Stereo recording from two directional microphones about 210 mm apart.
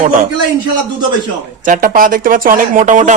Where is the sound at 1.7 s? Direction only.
40° right (ahead or behind).